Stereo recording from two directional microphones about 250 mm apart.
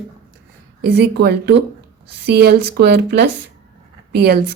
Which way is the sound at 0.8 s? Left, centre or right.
Right.